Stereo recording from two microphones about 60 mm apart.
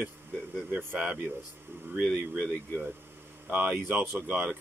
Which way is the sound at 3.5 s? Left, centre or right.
Right.